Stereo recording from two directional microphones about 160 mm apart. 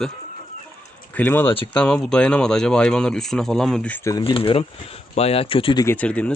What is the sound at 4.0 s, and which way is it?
Speech, 20° left (ahead or behind).